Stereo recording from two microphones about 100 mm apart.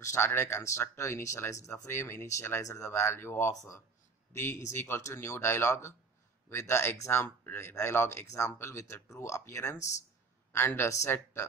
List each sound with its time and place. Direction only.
0.0 s speech: 25° left (ahead or behind)